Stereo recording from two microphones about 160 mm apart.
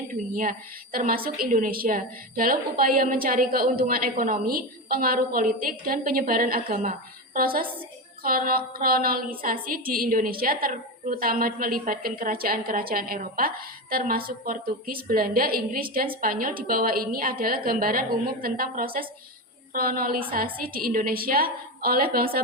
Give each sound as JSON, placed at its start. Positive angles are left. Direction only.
{"t": 0.1, "sound": "a woman's voice", "side_deg": -60}